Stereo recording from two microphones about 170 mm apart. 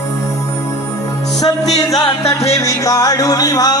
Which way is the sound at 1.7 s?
20° left (ahead or behind).